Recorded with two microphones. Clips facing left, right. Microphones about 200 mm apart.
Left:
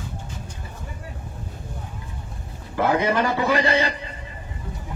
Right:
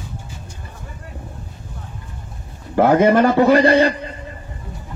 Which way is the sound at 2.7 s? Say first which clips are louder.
Right 8 dB; 50° right (ahead or behind).